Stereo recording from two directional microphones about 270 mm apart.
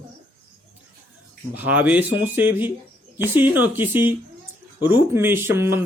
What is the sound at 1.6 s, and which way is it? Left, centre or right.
Speech, centre.